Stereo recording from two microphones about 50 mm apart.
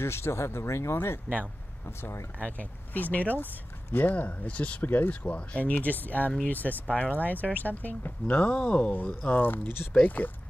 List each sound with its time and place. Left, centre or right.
0.0 s speech: left
1.3 s speech: centre
1.9 s speech: left
2.3 s speech: left
4.8 s speech: left
5.2 s speech: left
8.4 s speech: left